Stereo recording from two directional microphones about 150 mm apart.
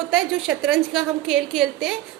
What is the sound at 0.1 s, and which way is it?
A woman's voice, 5° right (ahead or behind).